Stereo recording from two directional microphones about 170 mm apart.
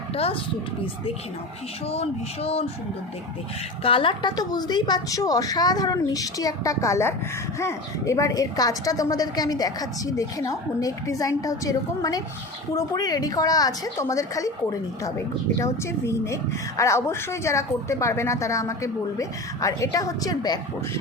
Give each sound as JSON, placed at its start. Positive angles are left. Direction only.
{"t": 0.1, "sound": "speech", "side_deg": 35}
{"t": 1.9, "sound": "a sound", "side_deg": 35}
{"t": 3.8, "sound": "a woman's voice", "side_deg": 30}